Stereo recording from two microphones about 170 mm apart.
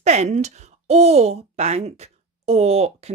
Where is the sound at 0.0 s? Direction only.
40° right (ahead or behind).